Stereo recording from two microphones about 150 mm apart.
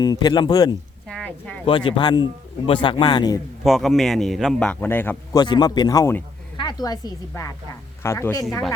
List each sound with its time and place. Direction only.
0.0 s a man's voice: 30° left (ahead or behind)
1.0 s a sound: 5° left (ahead or behind)
1.6 s speech: 35° left (ahead or behind)
3.6 s speech: centre (ahead or behind)
5.3 s a man's voice: 30° left (ahead or behind)